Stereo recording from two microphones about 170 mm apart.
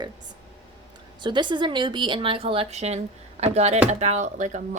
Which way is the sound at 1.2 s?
25° right (ahead or behind).